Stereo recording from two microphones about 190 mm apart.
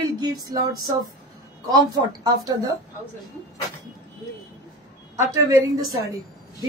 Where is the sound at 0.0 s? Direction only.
20° right (ahead or behind).